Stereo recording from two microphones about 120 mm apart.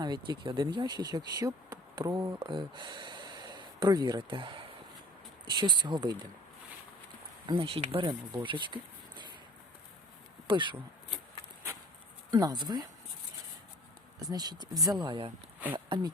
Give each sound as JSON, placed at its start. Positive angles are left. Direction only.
{"t": 0.0, "sound": "speech", "side_deg": -40}
{"t": 2.4, "sound": "speech", "side_deg": -40}
{"t": 7.4, "sound": "speech", "side_deg": -45}
{"t": 8.0, "sound": "speech", "side_deg": -40}
{"t": 10.4, "sound": "speech", "side_deg": -45}
{"t": 12.3, "sound": "speech", "side_deg": -35}
{"t": 14.2, "sound": "speech", "side_deg": -35}